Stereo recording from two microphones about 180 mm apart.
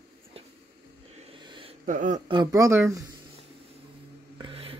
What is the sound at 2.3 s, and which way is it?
Speech, 20° right (ahead or behind).